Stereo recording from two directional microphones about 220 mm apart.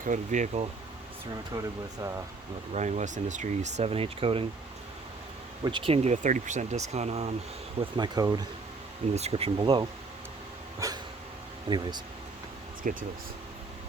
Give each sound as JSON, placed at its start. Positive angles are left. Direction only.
{"t": 0.0, "sound": "speech", "side_deg": -35}
{"t": 1.5, "sound": "speech", "side_deg": -15}
{"t": 2.7, "sound": "speech", "side_deg": -30}
{"t": 5.6, "sound": "speech", "side_deg": -20}
{"t": 9.1, "sound": "speech", "side_deg": -30}
{"t": 10.8, "sound": "cough", "side_deg": -15}
{"t": 11.7, "sound": "speech", "side_deg": -20}
{"t": 12.8, "sound": "speech", "side_deg": -40}